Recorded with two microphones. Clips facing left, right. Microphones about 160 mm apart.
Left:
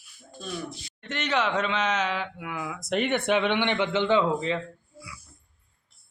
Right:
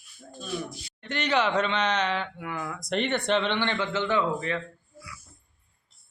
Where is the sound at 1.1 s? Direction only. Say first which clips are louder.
Right 1 dB; centre (ahead or behind); by 4.6 s 20° left (ahead or behind).